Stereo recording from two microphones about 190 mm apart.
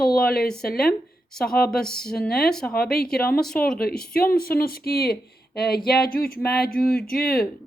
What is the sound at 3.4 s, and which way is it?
Speech, 5° left (ahead or behind).